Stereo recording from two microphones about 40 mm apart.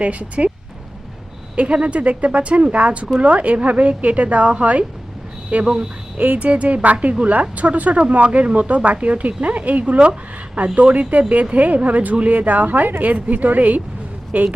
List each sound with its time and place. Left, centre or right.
0.0 s speech: right
1.5 s speech: right